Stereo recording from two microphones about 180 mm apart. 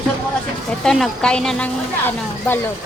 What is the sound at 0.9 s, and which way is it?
A woman's voice, centre (ahead or behind).